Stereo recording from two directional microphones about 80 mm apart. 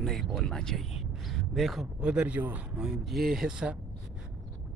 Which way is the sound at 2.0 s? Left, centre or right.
Centre.